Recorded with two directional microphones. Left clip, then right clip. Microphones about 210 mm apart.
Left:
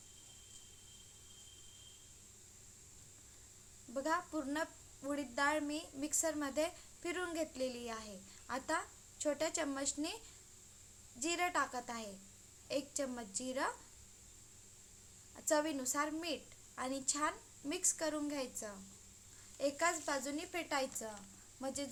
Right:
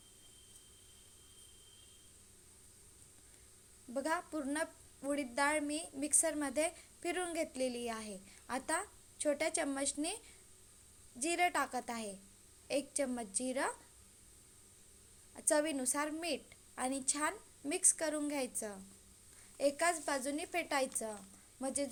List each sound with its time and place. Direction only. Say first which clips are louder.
3.9 s a woman's voice: even; 15° right (ahead or behind)
11.2 s a woman's voice: right 3 dB; 15° right (ahead or behind)
15.4 s a woman's voice: right 2 dB; 15° right (ahead or behind)